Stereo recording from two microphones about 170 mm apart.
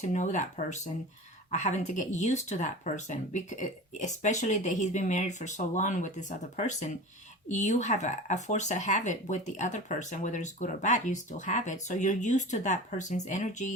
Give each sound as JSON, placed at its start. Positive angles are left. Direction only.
{"t": 0.0, "sound": "speech", "side_deg": 45}